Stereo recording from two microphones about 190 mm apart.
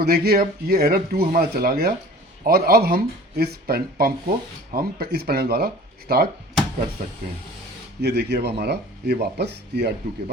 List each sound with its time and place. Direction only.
0.0 s speech: 55° right (ahead or behind)